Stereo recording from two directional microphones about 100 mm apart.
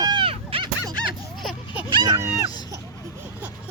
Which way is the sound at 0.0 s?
45° right (ahead or behind).